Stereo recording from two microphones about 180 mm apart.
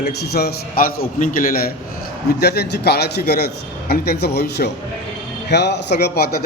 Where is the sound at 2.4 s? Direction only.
65° left (ahead or behind).